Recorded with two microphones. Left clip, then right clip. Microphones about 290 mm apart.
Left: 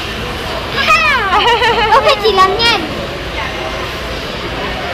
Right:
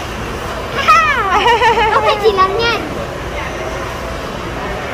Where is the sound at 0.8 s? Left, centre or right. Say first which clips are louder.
Right 1 dB; centre.